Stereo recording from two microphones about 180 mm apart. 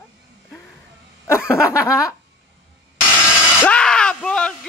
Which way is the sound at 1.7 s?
15° left (ahead or behind).